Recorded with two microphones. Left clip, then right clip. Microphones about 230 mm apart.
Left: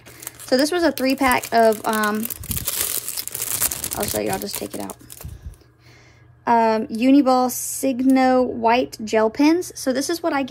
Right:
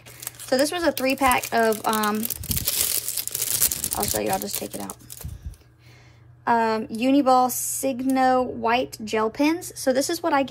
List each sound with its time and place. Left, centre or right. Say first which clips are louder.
0.5 s speech: left 3 dB; centre
2.5 s crumpling: right 1 dB; centre
3.9 s speech: left 1 dB; centre
6.4 s speech: left 4 dB; centre